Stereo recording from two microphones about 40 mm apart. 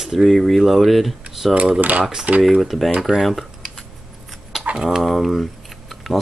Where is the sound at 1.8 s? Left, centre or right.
Right.